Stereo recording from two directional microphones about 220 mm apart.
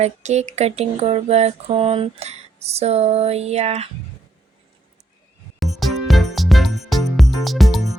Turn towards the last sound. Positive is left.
turn(degrees=0)  # may be behind; listen again after turning